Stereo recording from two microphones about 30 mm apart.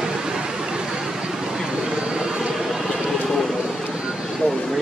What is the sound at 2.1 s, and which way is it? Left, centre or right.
Vehicle, right.